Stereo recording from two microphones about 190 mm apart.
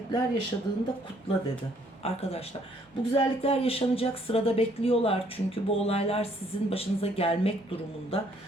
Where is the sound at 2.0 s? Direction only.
30° left (ahead or behind).